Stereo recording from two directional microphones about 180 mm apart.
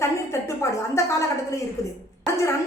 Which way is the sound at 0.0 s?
15° left (ahead or behind).